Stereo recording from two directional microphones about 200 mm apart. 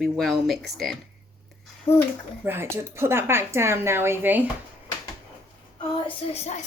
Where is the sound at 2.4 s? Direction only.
10° right (ahead or behind).